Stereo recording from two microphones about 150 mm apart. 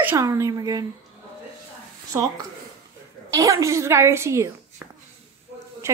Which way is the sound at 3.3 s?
20° right (ahead or behind).